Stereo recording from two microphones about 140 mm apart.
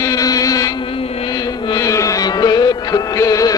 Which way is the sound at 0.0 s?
25° left (ahead or behind).